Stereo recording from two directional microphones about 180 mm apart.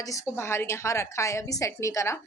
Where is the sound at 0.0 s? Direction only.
20° left (ahead or behind).